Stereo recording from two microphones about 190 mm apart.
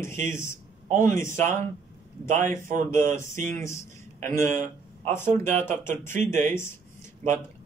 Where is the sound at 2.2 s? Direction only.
40° right (ahead or behind).